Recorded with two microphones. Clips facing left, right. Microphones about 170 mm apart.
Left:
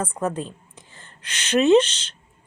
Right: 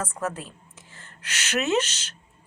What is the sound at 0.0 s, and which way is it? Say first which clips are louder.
A woman's voice: left 5 dB; 30° left (ahead or behind).